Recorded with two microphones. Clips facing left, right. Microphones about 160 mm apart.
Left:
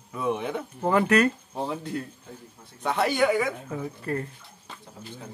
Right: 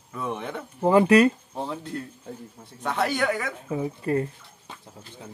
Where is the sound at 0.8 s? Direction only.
15° right (ahead or behind).